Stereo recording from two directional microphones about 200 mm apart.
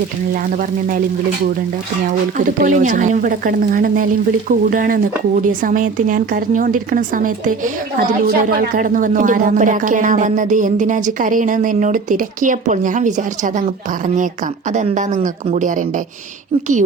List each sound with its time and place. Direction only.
2.6 s a woman's voice: 40° right (ahead or behind)
14.7 s speech: 40° right (ahead or behind)